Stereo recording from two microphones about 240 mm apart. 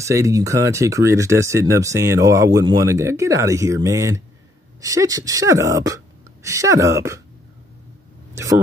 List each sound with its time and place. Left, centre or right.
0.0 s speech: centre